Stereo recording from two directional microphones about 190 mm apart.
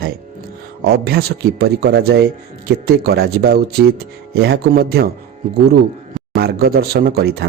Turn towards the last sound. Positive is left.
turn(degrees=-55)  # may be behind; listen again after turning